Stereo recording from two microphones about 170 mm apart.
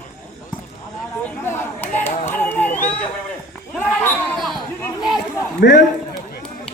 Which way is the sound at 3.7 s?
5° left (ahead or behind).